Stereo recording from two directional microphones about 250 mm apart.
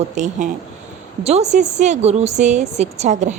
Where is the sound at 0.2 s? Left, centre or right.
Right.